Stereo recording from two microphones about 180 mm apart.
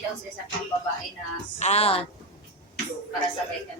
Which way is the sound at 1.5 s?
35° left (ahead or behind).